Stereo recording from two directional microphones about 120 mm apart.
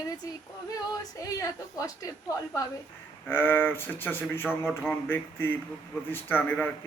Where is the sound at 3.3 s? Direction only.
15° left (ahead or behind).